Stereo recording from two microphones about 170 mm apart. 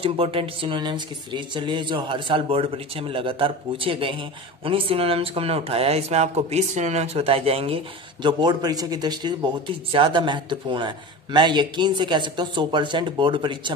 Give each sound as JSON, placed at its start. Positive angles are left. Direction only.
{"t": 0.0, "sound": "speech", "side_deg": -30}